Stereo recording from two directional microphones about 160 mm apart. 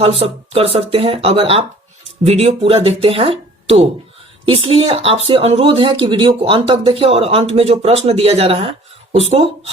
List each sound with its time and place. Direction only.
0.0 s speech: 40° right (ahead or behind)